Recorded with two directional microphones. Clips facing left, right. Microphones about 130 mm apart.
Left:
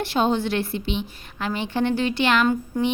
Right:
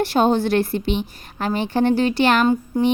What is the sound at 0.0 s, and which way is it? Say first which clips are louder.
A woman's voice: right 4 dB; 45° right (ahead or behind).